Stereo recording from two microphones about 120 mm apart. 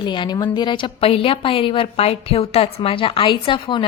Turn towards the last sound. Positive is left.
turn(degrees=40)  # may be behind; listen again after turning